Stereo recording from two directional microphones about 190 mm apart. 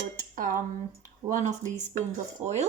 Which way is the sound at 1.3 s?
40° right (ahead or behind).